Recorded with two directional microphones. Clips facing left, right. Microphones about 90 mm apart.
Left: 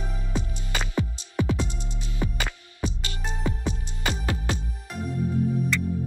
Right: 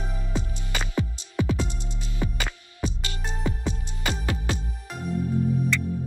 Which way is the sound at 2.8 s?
20° left (ahead or behind).